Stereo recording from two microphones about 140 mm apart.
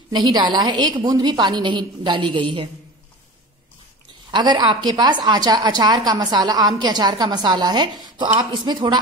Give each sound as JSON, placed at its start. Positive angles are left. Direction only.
{"t": 0.1, "sound": "a woman's voice", "side_deg": -30}
{"t": 4.3, "sound": "a woman's voice", "side_deg": -35}